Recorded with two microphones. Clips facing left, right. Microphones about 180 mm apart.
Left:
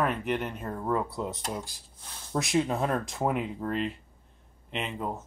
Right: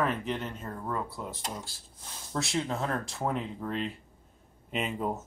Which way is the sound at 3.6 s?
5° left (ahead or behind).